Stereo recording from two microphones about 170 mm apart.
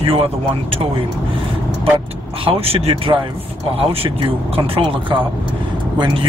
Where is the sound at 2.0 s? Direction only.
35° right (ahead or behind).